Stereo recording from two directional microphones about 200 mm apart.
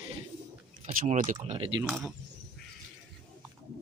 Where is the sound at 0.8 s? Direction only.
35° right (ahead or behind).